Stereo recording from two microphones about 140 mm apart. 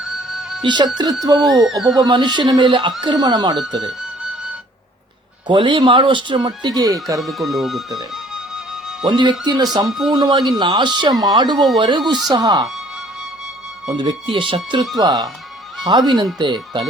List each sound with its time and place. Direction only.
0.0 s music: centre (ahead or behind)
0.6 s speech: 35° right (ahead or behind)
1.8 s speech: centre (ahead or behind)
2.0 s speech: 30° right (ahead or behind)
5.5 s speech: 35° right (ahead or behind)
7.2 s speech: centre (ahead or behind)
8.1 s music: centre (ahead or behind)
9.0 s speech: 30° right (ahead or behind)
13.9 s speech: 35° right (ahead or behind)